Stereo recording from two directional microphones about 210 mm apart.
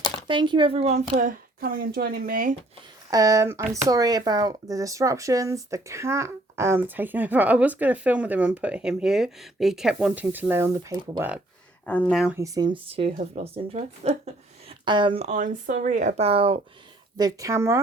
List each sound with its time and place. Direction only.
0.3 s a woman's voice: 20° right (ahead or behind); by 2.6 s 40° right (ahead or behind)
3.1 s speech: 15° right (ahead or behind)
11.9 s speech: 5° left (ahead or behind)
12.2 s a woman's voice: 10° right (ahead or behind); by 16.6 s 25° right (ahead or behind)
17.2 s speech: 15° right (ahead or behind)